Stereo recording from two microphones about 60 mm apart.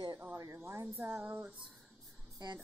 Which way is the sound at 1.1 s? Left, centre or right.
Right.